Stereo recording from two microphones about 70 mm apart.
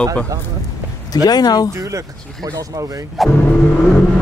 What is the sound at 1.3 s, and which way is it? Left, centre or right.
Speech, left.